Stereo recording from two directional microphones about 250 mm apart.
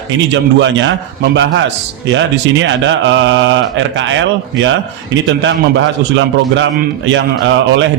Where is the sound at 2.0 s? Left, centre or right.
Right.